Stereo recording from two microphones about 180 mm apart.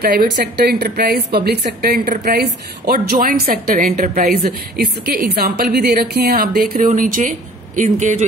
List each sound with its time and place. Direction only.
0.0 s speech: 60° right (ahead or behind); by 8.3 s 40° right (ahead or behind)